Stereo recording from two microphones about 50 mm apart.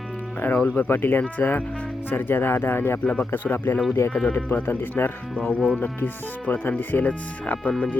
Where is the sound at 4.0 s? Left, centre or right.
Left.